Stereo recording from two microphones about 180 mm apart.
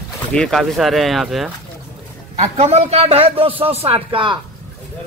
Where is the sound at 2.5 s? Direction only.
35° right (ahead or behind).